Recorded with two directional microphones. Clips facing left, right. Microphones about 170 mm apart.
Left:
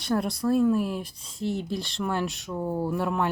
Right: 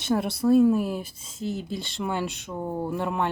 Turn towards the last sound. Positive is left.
turn(degrees=0)  # may be behind; listen again after turning